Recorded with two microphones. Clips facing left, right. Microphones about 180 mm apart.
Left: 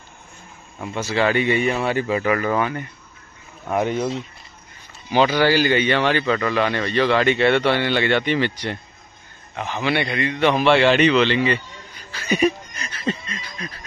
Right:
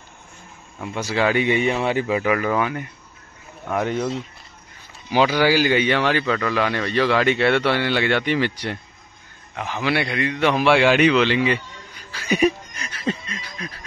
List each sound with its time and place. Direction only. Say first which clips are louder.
0.9 s speech: even; 10° right (ahead or behind)
3.7 s speech: left 1 dB; 20° left (ahead or behind)
5.1 s a man's voice: left 1 dB; 10° right (ahead or behind)
12.1 s snicker: even; 10° right (ahead or behind)